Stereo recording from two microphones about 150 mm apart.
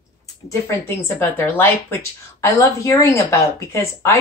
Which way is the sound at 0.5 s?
15° left (ahead or behind).